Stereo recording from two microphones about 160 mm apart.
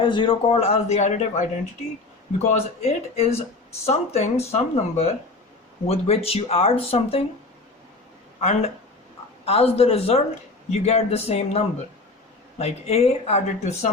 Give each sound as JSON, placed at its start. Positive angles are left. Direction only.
{"t": 0.0, "sound": "speech", "side_deg": 30}
{"t": 2.5, "sound": "speech", "side_deg": 40}
{"t": 8.4, "sound": "speech", "side_deg": 45}